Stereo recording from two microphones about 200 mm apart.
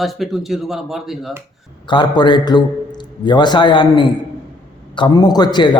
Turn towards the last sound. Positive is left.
turn(degrees=20)  # may be behind; listen again after turning